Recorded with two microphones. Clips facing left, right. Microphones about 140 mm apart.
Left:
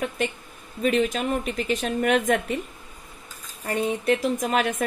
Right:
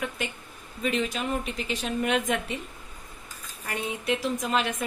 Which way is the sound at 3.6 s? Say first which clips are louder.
Left 7 dB; 40° left (ahead or behind).